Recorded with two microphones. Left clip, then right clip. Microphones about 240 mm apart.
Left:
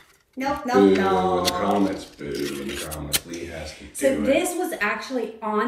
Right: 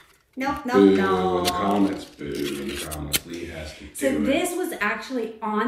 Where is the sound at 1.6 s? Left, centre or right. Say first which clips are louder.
Even; centre.